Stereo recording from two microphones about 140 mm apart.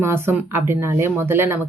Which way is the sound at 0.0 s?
15° right (ahead or behind).